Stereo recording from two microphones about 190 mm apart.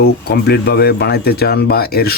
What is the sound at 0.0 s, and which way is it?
Speech, 55° left (ahead or behind).